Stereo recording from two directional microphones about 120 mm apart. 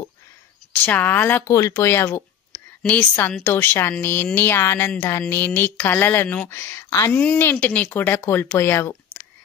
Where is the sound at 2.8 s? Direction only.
10° left (ahead or behind).